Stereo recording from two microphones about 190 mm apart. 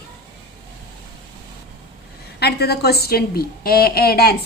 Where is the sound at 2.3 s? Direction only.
60° left (ahead or behind).